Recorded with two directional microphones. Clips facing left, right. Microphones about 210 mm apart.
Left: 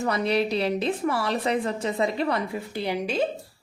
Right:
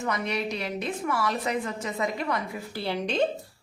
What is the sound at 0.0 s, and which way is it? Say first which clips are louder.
A woman's voice: left 5 dB; 30° left (ahead or behind).